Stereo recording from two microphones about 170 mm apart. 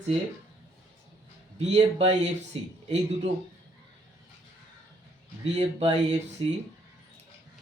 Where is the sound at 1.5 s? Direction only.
40° right (ahead or behind).